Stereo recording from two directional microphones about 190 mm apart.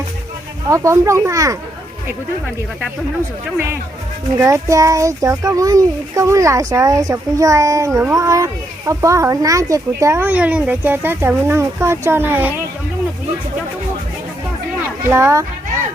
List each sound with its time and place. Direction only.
0.7 s speech: 15° right (ahead or behind)
4.4 s speech: 15° right (ahead or behind)
15.1 s speech: 15° right (ahead or behind)